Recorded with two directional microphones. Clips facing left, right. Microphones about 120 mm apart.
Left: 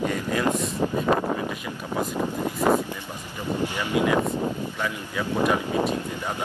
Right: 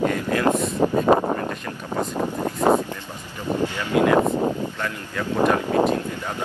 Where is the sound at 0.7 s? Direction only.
45° right (ahead or behind).